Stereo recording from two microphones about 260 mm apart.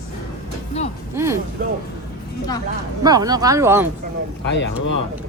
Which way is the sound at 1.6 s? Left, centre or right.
Right.